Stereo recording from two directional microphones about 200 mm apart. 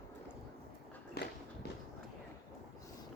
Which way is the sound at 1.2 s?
55° left (ahead or behind).